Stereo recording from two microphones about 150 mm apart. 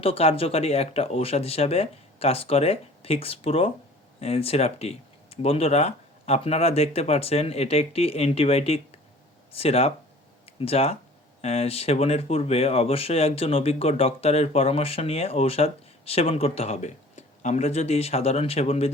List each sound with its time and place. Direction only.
0.0 s speech: 40° left (ahead or behind)